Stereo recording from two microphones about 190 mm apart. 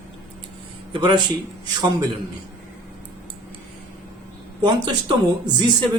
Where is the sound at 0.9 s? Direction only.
25° right (ahead or behind).